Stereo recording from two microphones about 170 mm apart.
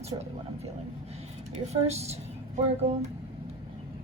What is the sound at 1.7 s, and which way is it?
Speech, 40° right (ahead or behind).